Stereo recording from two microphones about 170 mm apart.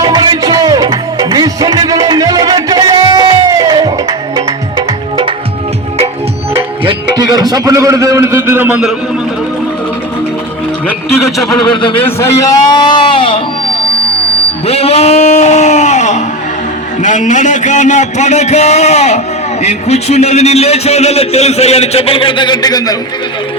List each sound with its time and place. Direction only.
0.0 s music: 25° right (ahead or behind)
6.6 s a man's voice: 25° right (ahead or behind); by 9.0 s 5° right (ahead or behind)
11.3 s a man's voice: 30° left (ahead or behind)
12.0 s a man's voice: 15° left (ahead or behind)
14.7 s a man's voice: 35° left (ahead or behind)